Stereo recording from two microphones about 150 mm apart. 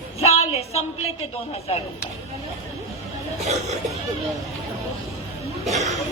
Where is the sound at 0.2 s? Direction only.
45° left (ahead or behind).